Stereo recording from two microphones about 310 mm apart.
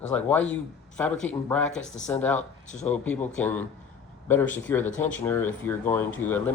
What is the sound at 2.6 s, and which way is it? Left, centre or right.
Speech, left.